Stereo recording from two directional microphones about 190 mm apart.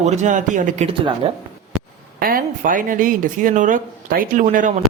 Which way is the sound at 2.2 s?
50° right (ahead or behind).